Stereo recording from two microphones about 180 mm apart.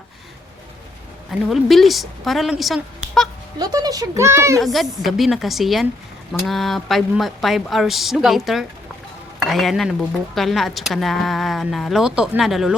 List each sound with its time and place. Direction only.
1.3 s speech: centre (ahead or behind)
3.6 s speech: 20° right (ahead or behind)
4.6 s speech: centre (ahead or behind)